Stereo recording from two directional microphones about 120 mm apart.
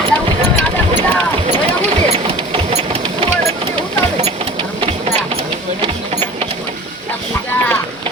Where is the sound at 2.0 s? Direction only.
55° right (ahead or behind).